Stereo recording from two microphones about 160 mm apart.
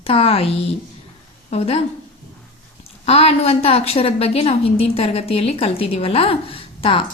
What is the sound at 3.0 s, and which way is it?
A woman's voice, 40° left (ahead or behind).